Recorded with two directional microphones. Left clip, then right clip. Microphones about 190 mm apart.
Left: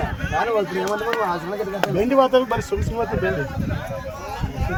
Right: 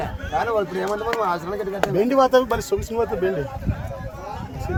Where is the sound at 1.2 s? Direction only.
25° right (ahead or behind).